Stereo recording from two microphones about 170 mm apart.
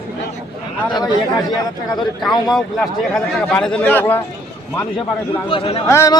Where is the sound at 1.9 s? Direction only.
Centre (ahead or behind).